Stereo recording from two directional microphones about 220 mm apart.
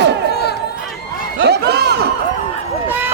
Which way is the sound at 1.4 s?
50° right (ahead or behind).